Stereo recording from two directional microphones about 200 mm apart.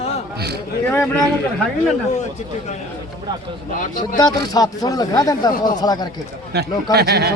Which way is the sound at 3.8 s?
40° left (ahead or behind).